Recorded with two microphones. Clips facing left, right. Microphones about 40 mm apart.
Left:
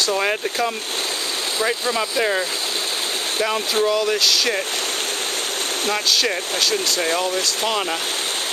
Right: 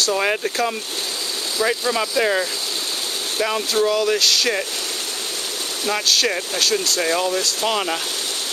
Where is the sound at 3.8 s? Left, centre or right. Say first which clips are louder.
Right 1 dB; centre.